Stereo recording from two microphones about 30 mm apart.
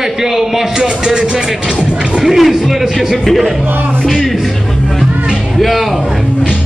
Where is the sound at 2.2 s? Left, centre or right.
Centre.